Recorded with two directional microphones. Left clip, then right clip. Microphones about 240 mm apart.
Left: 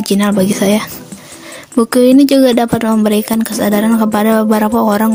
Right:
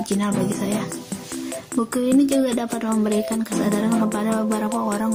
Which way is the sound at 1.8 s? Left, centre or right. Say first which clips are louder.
Left 12 dB; left.